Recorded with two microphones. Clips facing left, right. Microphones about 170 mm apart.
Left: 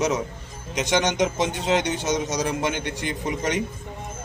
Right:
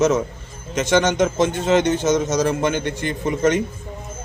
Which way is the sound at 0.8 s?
15° left (ahead or behind).